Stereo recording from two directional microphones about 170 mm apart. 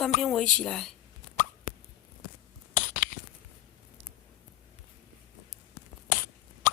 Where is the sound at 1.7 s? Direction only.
55° left (ahead or behind).